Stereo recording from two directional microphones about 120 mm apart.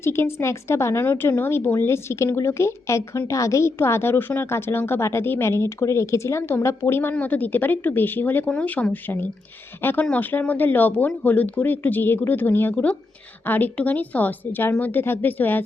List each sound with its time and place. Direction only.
0.0 s a woman's voice: 20° left (ahead or behind)